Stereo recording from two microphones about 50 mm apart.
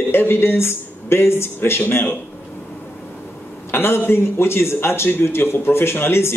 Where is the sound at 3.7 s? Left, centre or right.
Left.